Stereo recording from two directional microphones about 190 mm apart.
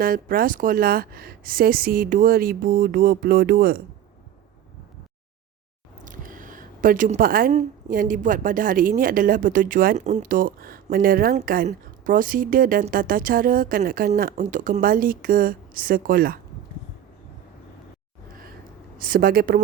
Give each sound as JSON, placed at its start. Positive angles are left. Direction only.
{"t": 0.0, "sound": "speech", "side_deg": -50}
{"t": 6.1, "sound": "speech", "side_deg": -45}
{"t": 18.9, "sound": "speech", "side_deg": -50}